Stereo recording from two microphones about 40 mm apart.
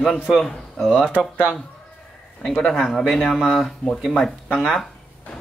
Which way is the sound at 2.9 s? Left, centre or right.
Centre.